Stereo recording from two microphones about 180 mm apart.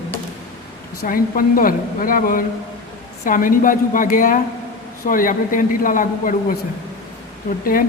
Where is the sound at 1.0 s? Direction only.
50° left (ahead or behind).